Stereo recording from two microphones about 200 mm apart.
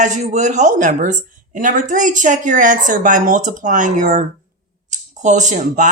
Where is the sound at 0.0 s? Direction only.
35° right (ahead or behind).